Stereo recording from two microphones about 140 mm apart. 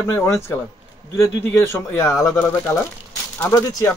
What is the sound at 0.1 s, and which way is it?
Speech, 15° left (ahead or behind).